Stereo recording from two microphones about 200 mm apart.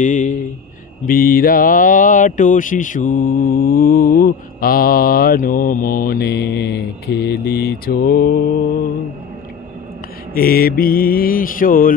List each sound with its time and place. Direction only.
0.0 s speech: 40° left (ahead or behind)
10.3 s speech: 50° left (ahead or behind)